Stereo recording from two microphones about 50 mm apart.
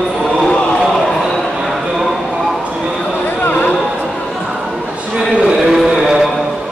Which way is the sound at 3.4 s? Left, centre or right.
Left.